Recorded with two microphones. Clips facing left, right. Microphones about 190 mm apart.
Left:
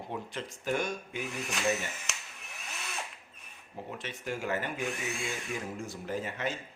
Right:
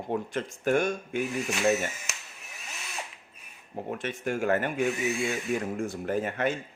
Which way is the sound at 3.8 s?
50° right (ahead or behind).